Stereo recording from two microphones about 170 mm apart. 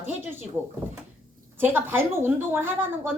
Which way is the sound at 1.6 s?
10° right (ahead or behind).